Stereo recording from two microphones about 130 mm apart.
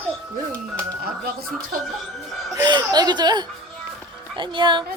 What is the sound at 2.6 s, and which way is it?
Speech, 35° right (ahead or behind).